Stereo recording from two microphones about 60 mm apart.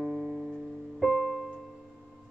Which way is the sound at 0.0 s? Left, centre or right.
Centre.